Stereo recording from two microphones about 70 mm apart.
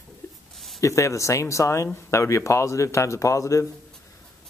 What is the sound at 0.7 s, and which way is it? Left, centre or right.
Speech, left.